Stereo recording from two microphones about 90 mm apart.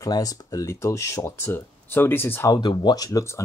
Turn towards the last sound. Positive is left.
turn(degrees=45)  # may be behind; listen again after turning